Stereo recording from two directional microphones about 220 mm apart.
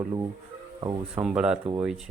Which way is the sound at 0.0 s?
15° right (ahead or behind).